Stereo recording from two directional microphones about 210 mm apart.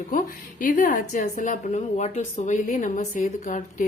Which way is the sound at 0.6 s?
40° left (ahead or behind).